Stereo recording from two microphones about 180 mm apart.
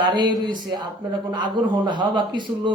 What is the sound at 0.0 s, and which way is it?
A man's voice, 25° right (ahead or behind).